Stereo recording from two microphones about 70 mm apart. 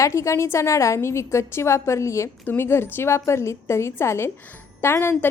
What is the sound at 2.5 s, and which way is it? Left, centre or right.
A woman's voice, left.